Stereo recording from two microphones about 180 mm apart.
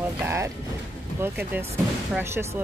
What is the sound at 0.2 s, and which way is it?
Speech, 15° right (ahead or behind).